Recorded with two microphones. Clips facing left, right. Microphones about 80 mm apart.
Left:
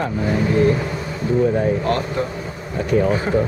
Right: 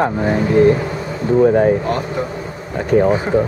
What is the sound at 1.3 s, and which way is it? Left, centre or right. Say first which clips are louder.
Speech: right 6 dB; right.